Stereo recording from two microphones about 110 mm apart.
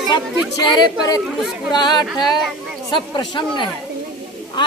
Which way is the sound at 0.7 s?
35° left (ahead or behind).